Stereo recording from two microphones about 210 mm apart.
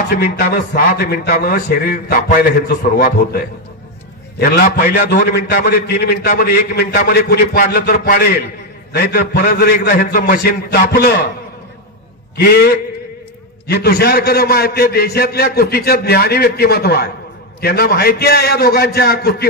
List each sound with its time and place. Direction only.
0.1 s a man's voice: 45° left (ahead or behind)
12.4 s a man's voice: 50° left (ahead or behind)